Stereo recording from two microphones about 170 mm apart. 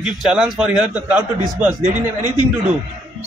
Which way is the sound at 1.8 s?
25° left (ahead or behind).